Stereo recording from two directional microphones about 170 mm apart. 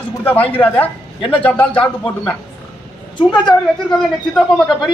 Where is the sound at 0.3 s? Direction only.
10° left (ahead or behind).